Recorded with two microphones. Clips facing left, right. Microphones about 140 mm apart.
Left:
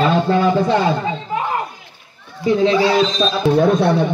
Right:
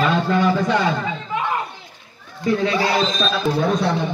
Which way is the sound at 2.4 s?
25° left (ahead or behind).